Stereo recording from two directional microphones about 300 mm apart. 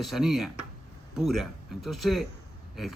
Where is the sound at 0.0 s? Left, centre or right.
Centre.